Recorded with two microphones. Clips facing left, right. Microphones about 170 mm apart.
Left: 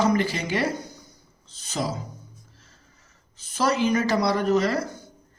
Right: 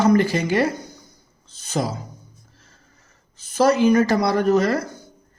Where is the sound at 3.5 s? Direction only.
50° right (ahead or behind).